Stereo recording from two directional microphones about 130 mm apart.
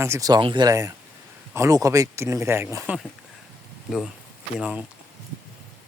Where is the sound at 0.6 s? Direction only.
25° right (ahead or behind).